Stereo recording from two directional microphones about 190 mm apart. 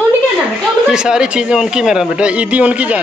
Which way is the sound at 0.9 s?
5° right (ahead or behind).